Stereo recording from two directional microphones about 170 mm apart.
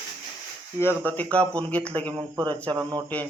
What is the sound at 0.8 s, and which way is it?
Speech, 10° left (ahead or behind).